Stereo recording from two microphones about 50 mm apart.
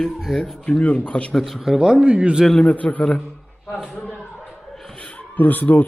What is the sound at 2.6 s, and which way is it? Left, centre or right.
Speech, left.